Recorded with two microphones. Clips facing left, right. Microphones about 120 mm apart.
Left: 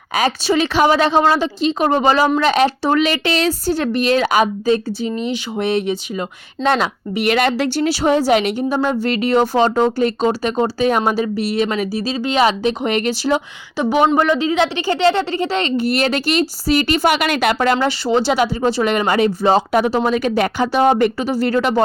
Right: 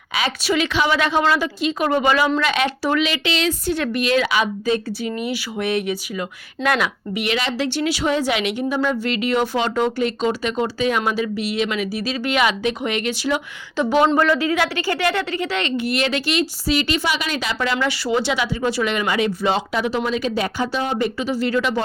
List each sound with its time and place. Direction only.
0.1 s speech: 45° left (ahead or behind)
5.0 s speech: 25° left (ahead or behind)
7.3 s speech: 55° left (ahead or behind)
7.9 s speech: 35° left (ahead or behind)
13.7 s speech: 15° left (ahead or behind); by 17.7 s 55° left (ahead or behind)
17.7 s speech: 30° left (ahead or behind)
20.1 s speech: 55° left (ahead or behind)